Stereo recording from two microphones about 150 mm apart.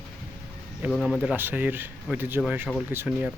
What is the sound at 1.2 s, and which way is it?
Speech, 10° right (ahead or behind).